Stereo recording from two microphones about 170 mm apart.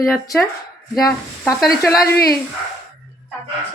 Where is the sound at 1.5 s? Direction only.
20° left (ahead or behind).